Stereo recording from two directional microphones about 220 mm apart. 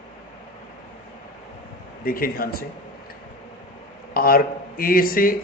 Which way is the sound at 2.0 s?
40° left (ahead or behind).